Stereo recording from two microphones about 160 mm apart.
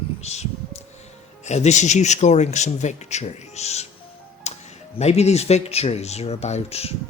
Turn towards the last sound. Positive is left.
turn(degrees=40)  # may be behind; listen again after turning